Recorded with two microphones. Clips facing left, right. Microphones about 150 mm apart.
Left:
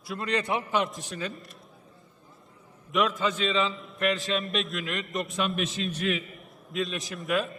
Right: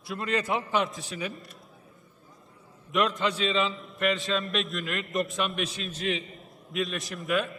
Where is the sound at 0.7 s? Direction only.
5° left (ahead or behind).